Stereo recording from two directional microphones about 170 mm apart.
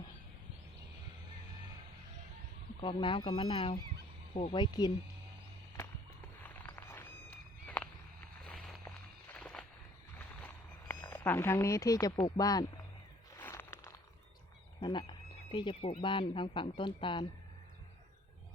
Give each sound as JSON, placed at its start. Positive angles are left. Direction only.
{"t": 2.8, "sound": "speech", "side_deg": 30}
{"t": 6.4, "sound": "walk", "side_deg": 10}
{"t": 8.4, "sound": "a sound", "side_deg": 0}
{"t": 11.1, "sound": "speech", "side_deg": 15}
{"t": 13.3, "sound": "a sound", "side_deg": 15}
{"t": 14.8, "sound": "speech", "side_deg": 30}